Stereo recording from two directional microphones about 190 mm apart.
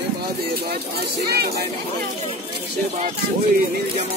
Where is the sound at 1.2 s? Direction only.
55° right (ahead or behind).